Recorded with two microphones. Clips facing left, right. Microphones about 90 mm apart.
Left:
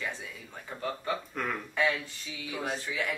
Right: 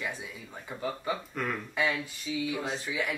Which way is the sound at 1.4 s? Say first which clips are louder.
Right 1 dB; centre (ahead or behind).